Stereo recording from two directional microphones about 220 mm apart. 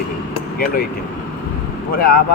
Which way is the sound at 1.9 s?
40° left (ahead or behind).